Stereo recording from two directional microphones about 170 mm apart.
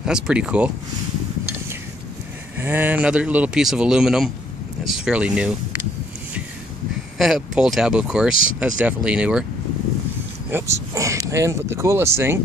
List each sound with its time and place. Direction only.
0.0 s speech: 5° right (ahead or behind)
2.6 s speech: 10° right (ahead or behind)
7.2 s speech: centre (ahead or behind)
10.5 s speech: 15° right (ahead or behind)